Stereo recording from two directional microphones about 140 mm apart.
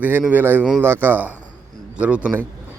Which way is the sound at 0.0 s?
10° right (ahead or behind).